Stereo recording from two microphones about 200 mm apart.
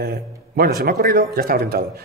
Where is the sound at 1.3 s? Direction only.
50° right (ahead or behind).